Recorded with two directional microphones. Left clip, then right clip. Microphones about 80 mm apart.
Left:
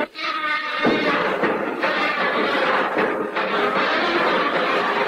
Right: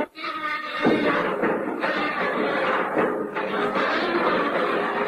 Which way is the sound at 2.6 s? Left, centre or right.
Right.